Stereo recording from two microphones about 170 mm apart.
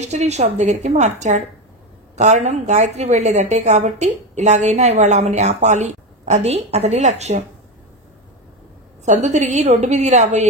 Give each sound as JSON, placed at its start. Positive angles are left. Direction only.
{"t": 0.0, "sound": "a woman's voice", "side_deg": -40}
{"t": 2.1, "sound": "a woman's voice", "side_deg": -40}
{"t": 9.0, "sound": "a woman's voice", "side_deg": -45}